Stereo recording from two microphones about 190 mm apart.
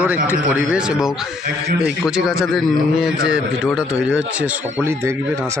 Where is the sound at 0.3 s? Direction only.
5° right (ahead or behind).